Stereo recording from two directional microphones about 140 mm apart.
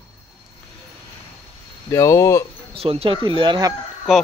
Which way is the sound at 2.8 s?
45° right (ahead or behind).